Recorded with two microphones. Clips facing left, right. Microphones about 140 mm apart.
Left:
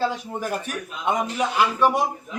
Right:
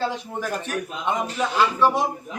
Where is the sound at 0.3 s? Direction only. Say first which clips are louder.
Right 1 dB; 10° left (ahead or behind).